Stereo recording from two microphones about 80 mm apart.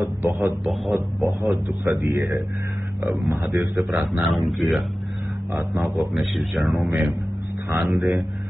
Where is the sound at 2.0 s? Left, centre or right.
Right.